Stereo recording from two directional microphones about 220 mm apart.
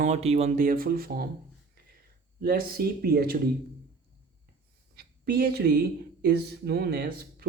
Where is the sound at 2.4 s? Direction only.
40° right (ahead or behind).